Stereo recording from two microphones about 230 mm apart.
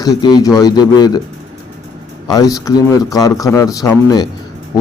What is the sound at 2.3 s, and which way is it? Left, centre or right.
Speech, centre.